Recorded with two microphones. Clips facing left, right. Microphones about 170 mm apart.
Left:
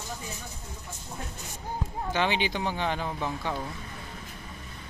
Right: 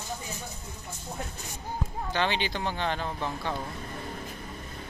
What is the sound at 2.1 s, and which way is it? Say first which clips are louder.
Speech: left 2 dB; 15° left (ahead or behind).